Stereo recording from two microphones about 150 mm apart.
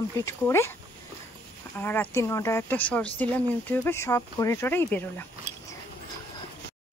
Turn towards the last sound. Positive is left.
turn(degrees=15)  # may be behind; listen again after turning